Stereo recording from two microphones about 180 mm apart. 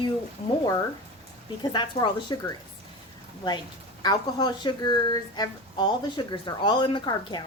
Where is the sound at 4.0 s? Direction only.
20° left (ahead or behind).